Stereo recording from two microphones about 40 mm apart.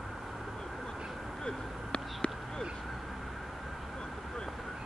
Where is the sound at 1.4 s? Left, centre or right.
Centre.